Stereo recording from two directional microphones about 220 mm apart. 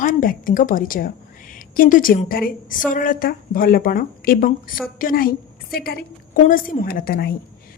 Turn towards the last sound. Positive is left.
turn(degrees=45)  # may be behind; listen again after turning